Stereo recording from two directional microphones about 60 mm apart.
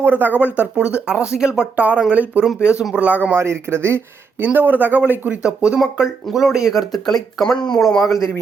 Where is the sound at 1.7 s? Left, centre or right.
Right.